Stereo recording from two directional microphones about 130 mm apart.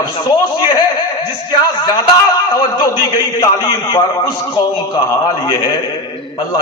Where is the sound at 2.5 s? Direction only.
35° left (ahead or behind).